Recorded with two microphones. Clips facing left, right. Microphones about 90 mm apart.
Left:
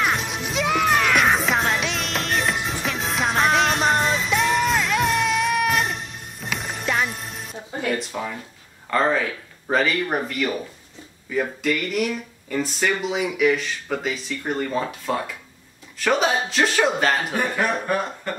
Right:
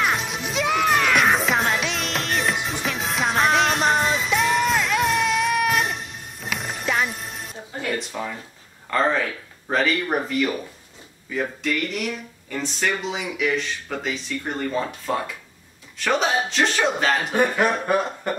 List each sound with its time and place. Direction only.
0.0 s music: centre (ahead or behind)
8.1 s speech: 10° left (ahead or behind)
17.6 s speech: 20° right (ahead or behind)